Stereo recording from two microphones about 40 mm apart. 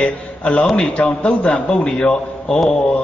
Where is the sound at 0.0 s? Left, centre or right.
Left.